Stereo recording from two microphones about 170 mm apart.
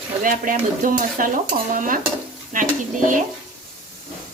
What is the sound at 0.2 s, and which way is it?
Stir, 55° right (ahead or behind).